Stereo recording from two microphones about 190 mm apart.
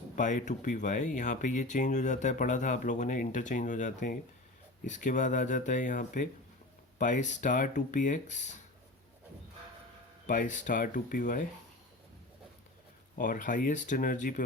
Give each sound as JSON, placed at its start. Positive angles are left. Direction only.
{"t": 0.2, "sound": "speech", "side_deg": 40}
{"t": 10.2, "sound": "speech", "side_deg": 40}
{"t": 13.1, "sound": "speech", "side_deg": 45}